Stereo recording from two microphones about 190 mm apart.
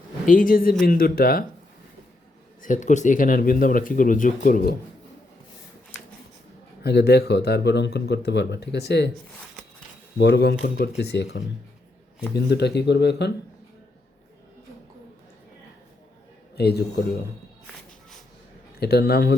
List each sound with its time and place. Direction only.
0.3 s speech: 45° left (ahead or behind)
2.6 s speech: 40° left (ahead or behind)
6.8 s speech: 60° left (ahead or behind)
10.2 s speech: 60° left (ahead or behind)
16.6 s speech: 60° left (ahead or behind)
18.8 s speech: 55° left (ahead or behind)